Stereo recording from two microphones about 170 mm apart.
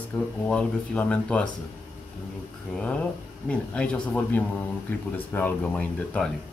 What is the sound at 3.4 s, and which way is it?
Speech, 5° left (ahead or behind).